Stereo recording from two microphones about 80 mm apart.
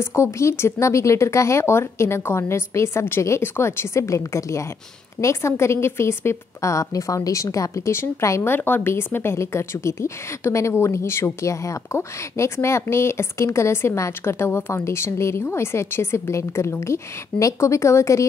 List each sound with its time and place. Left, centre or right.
0.0 s a woman's voice: left
8.5 s a woman's voice: left